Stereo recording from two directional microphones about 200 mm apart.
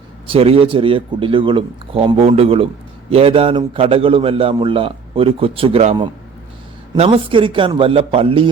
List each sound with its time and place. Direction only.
0.3 s a man's voice: 30° right (ahead or behind)